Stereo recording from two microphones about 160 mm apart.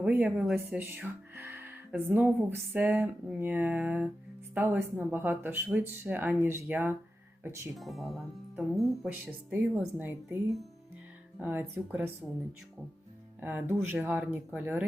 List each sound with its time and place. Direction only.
0.0 s speech: 10° right (ahead or behind)
7.8 s speech: centre (ahead or behind)
9.0 s speech: 10° right (ahead or behind)
11.3 s speech: 15° right (ahead or behind)
13.4 s speech: 15° right (ahead or behind)